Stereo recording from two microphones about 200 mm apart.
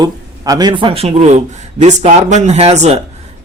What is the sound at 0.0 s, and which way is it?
Speech, 20° right (ahead or behind).